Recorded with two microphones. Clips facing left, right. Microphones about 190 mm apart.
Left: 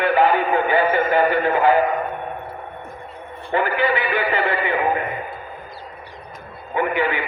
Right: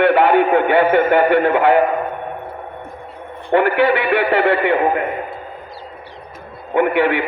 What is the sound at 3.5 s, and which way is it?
A man's voice, 65° right (ahead or behind).